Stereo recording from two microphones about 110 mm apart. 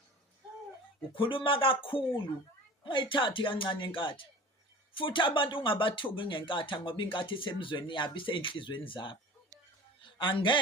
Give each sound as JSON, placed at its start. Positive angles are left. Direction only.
{"t": 1.1, "sound": "a man's voice", "side_deg": 55}